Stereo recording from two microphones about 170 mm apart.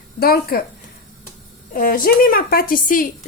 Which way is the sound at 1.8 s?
55° left (ahead or behind).